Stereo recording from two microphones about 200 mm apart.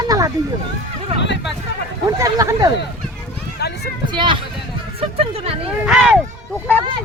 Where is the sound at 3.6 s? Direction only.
55° left (ahead or behind).